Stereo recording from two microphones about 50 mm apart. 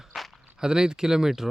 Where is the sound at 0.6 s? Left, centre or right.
Centre.